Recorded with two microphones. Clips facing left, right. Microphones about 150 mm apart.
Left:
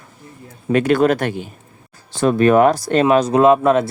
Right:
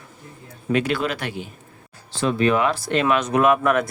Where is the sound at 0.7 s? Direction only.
45° left (ahead or behind).